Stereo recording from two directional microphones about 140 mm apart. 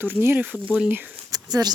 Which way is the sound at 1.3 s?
30° right (ahead or behind).